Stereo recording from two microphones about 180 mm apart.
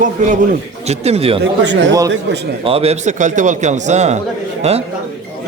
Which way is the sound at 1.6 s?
80° right.